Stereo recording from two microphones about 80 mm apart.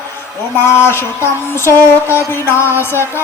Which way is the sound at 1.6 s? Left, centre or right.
Left.